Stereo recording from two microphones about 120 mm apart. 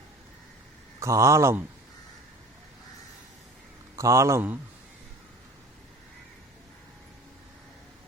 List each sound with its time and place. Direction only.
0.9 s a man's voice: 25° right (ahead or behind)
3.9 s a man's voice: 25° right (ahead or behind)